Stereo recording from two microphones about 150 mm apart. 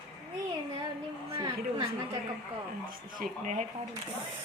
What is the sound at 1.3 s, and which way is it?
Speech, 35° right (ahead or behind).